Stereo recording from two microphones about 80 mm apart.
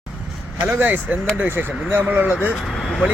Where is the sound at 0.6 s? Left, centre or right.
Right.